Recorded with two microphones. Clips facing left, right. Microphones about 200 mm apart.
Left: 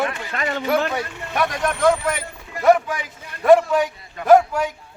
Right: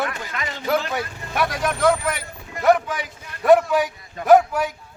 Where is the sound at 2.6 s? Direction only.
Centre (ahead or behind).